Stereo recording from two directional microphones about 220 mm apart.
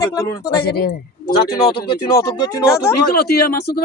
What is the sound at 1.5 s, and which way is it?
Speech, 20° left (ahead or behind).